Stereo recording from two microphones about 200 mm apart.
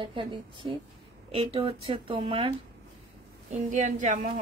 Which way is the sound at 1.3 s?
25° right (ahead or behind).